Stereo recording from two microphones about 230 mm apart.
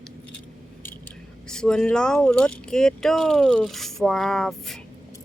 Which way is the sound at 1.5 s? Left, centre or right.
Centre.